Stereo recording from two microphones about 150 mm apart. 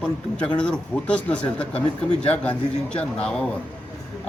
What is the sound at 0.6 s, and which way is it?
Speech, 5° left (ahead or behind).